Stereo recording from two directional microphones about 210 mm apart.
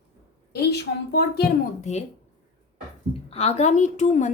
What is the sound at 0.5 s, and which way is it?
Speech, 50° left (ahead or behind).